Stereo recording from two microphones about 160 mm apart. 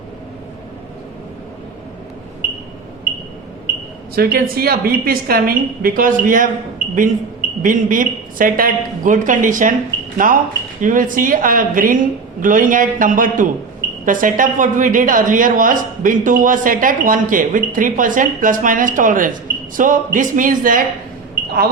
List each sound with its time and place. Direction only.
4.1 s a woman's voice: 70° right (ahead or behind)
7.6 s speech: 55° right (ahead or behind)